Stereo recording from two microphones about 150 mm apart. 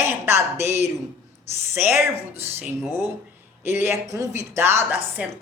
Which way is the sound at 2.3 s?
15° right (ahead or behind).